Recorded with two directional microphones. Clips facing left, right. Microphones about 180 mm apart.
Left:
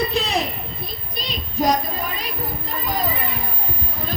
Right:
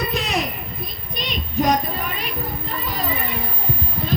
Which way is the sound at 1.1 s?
35° left (ahead or behind).